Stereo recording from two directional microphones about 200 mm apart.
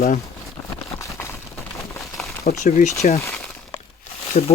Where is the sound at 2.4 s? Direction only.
40° left (ahead or behind).